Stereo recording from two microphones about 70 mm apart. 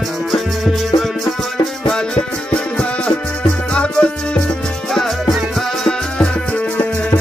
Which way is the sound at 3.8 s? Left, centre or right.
Centre.